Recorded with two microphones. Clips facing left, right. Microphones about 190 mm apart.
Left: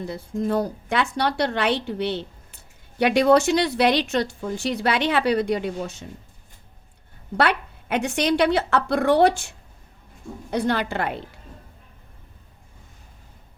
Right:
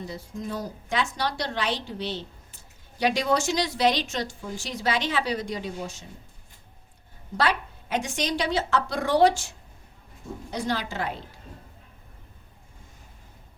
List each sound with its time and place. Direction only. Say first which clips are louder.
0.0 s a woman's voice: left 8 dB; 55° left (ahead or behind)
7.3 s a woman's voice: left 4 dB; 60° left (ahead or behind)
10.5 s a woman's voice: left 6 dB; 60° left (ahead or behind)